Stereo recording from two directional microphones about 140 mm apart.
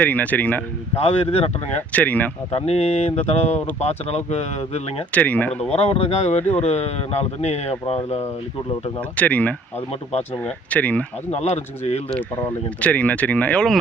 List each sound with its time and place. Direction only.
0.0 s speech: 10° left (ahead or behind)
0.9 s speech: 45° left (ahead or behind)
1.7 s speech: 10° left (ahead or behind)
2.5 s speech: 45° left (ahead or behind)
5.1 s speech: 10° left (ahead or behind)
5.7 s speech: 45° left (ahead or behind)
9.0 s speech: 10° left (ahead or behind)
11.3 s speech: 50° left (ahead or behind)
12.8 s speech: 10° left (ahead or behind)